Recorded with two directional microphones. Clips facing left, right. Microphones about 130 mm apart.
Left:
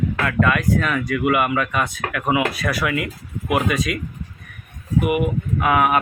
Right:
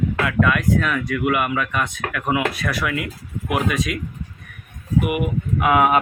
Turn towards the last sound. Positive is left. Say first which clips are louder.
# right 1 dB
turn(degrees=-20)  # may be behind; listen again after turning